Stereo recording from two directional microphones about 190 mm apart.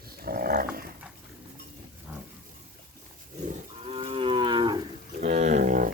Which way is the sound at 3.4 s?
30° right (ahead or behind).